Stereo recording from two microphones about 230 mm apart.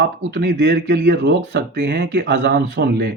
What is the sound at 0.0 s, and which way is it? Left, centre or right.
A man's voice, right.